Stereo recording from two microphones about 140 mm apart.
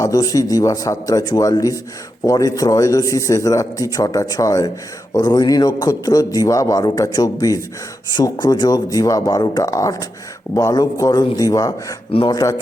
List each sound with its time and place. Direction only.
0.0 s a man's voice: 25° left (ahead or behind)